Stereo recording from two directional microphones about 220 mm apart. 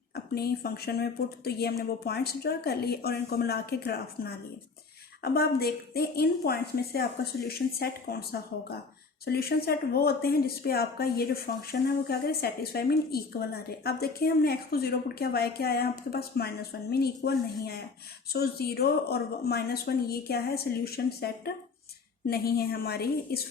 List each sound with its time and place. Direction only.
0.3 s speech: 45° left (ahead or behind)